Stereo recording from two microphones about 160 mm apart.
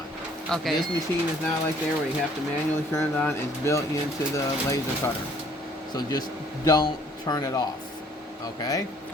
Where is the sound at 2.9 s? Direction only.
15° left (ahead or behind).